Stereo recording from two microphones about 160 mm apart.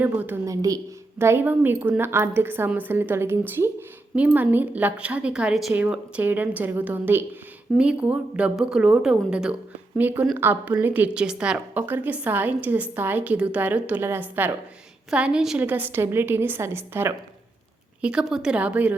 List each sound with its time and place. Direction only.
0.0 s a woman's voice: 10° right (ahead or behind)